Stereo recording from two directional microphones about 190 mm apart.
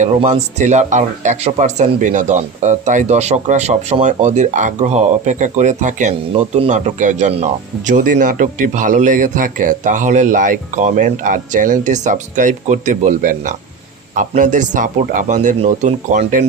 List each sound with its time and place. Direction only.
0.2 s speech: 35° right (ahead or behind)